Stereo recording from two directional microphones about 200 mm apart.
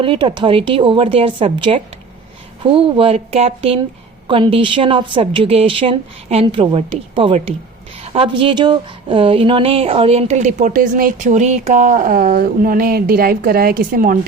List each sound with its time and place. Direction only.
0.0 s a woman's voice: 25° right (ahead or behind); by 14.2 s 45° right (ahead or behind)